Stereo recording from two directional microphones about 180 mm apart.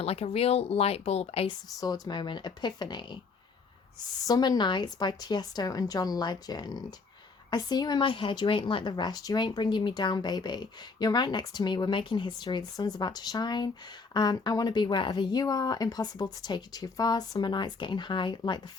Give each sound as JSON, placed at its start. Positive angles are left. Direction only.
{"t": 0.0, "sound": "speech", "side_deg": 35}
{"t": 1.8, "sound": "speech", "side_deg": 25}
{"t": 4.3, "sound": "speech", "side_deg": 20}